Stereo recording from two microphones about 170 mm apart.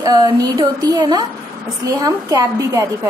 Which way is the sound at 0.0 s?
25° right (ahead or behind).